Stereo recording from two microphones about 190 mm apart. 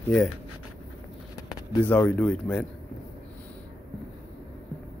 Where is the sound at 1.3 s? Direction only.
10° left (ahead or behind).